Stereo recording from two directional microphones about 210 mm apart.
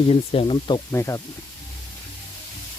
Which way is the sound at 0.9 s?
15° left (ahead or behind).